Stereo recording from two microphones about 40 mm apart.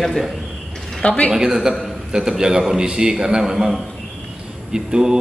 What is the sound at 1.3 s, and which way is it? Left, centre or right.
A man's voice, centre.